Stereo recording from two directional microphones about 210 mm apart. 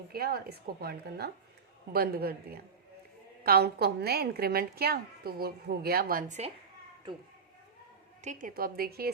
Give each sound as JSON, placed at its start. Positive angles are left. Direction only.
{"t": 0.1, "sound": "a woman's voice", "side_deg": -45}
{"t": 8.2, "sound": "a woman's voice", "side_deg": -35}